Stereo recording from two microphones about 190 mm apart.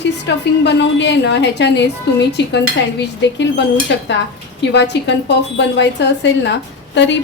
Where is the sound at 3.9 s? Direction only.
65° left (ahead or behind).